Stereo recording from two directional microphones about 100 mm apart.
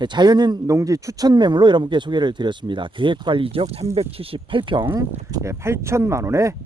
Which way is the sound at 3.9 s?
70° right (ahead or behind).